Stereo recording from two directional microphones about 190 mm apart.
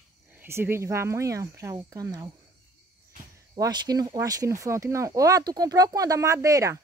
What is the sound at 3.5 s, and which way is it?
Speech, 20° right (ahead or behind).